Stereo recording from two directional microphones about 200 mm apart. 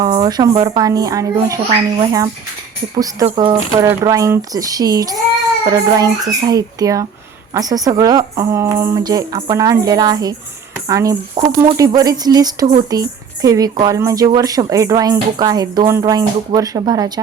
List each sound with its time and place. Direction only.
0.0 s speech: 20° right (ahead or behind)